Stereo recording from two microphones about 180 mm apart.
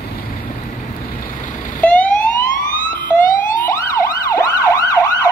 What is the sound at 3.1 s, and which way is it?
Police car, 45° left (ahead or behind).